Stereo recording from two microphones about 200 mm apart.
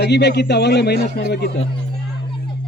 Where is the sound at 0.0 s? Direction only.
60° left (ahead or behind).